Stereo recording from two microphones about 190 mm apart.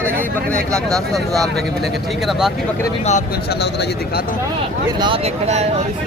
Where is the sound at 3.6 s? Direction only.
60° left (ahead or behind).